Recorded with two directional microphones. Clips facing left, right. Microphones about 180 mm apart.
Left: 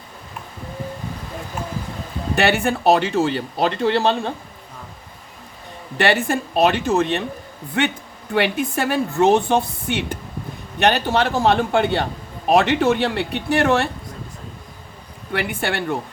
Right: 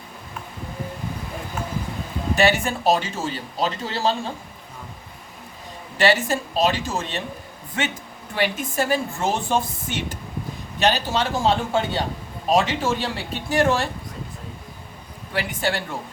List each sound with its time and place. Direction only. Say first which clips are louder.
2.3 s speech: left 2 dB; 60° left (ahead or behind)
6.0 s speech: left 1 dB; 60° left (ahead or behind)
15.3 s speech: left 2 dB; 60° left (ahead or behind)